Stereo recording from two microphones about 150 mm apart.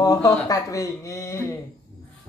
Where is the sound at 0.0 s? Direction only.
25° left (ahead or behind).